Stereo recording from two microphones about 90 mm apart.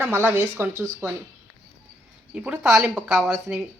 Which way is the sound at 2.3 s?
10° right (ahead or behind).